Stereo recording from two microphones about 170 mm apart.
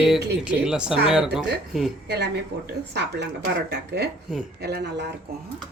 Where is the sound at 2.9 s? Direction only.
85° right.